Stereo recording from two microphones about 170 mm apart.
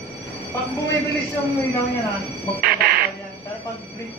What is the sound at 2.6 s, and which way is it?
Music, 65° right (ahead or behind).